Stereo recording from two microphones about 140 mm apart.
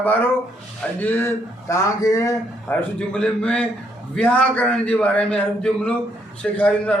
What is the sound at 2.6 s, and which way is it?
A man's voice, 5° left (ahead or behind).